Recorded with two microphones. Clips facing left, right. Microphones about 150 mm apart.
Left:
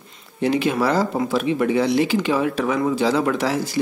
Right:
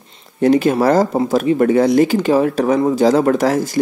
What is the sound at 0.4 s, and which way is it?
Speech, 45° right (ahead or behind).